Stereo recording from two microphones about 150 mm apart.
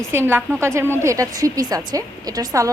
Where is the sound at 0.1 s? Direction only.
15° right (ahead or behind).